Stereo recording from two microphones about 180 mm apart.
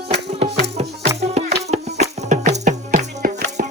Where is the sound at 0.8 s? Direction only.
35° right (ahead or behind).